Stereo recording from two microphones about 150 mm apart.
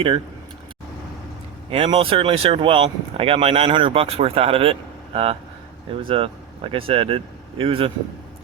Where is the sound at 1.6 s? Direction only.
40° right (ahead or behind).